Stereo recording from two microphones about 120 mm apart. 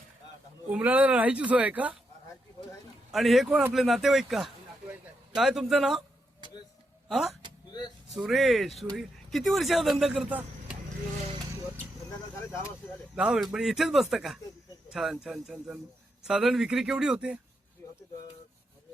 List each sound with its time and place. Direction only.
0.7 s speech: 15° right (ahead or behind)
3.1 s speech: centre (ahead or behind)
7.1 s speech: 5° right (ahead or behind)
7.7 s a sound: 35° left (ahead or behind)
8.1 s speech: centre (ahead or behind)
13.1 s speech: 5° right (ahead or behind)